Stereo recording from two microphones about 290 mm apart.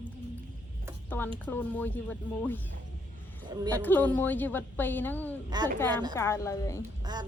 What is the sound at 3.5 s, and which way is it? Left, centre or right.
Speech, centre.